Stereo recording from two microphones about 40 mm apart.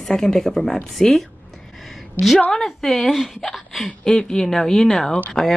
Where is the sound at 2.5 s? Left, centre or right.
Centre.